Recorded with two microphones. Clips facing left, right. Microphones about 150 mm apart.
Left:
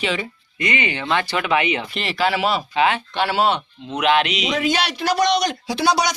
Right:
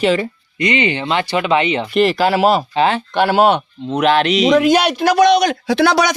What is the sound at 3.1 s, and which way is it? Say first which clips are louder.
Speech: right 6 dB; 50° right (ahead or behind).